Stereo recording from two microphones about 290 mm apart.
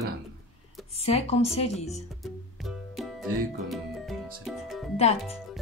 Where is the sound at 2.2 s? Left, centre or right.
Centre.